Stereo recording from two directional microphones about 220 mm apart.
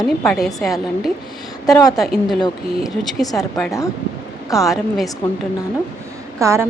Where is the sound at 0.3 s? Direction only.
Centre (ahead or behind).